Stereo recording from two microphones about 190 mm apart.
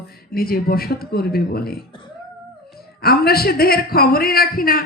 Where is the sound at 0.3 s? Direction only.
50° left (ahead or behind).